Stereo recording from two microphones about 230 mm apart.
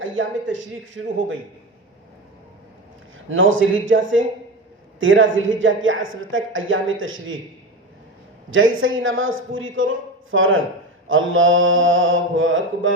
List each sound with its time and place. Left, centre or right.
0.0 s a woman's voice: right
3.2 s a woman's voice: right
8.4 s a woman's voice: right